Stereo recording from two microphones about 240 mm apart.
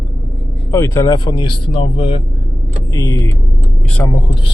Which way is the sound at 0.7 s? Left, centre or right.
Centre.